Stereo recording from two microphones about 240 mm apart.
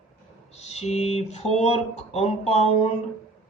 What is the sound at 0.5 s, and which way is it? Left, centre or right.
Speech, left.